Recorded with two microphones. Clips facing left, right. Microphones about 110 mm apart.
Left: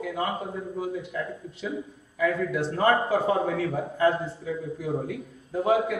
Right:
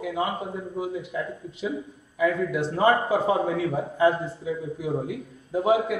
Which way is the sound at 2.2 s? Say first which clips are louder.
Right 2 dB; 20° right (ahead or behind).